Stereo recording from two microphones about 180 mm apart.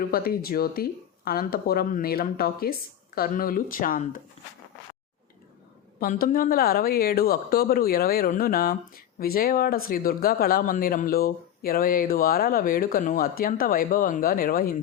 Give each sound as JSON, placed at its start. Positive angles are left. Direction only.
{"t": 0.0, "sound": "speech", "side_deg": 55}
{"t": 6.0, "sound": "speech", "side_deg": 50}